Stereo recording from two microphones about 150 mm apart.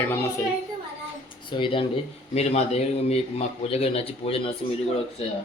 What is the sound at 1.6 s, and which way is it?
Speech, 35° left (ahead or behind).